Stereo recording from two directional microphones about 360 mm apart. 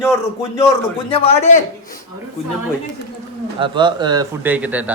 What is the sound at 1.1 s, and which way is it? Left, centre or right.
Speech, centre.